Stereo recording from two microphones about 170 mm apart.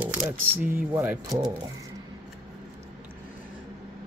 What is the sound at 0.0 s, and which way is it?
Speech, 10° right (ahead or behind).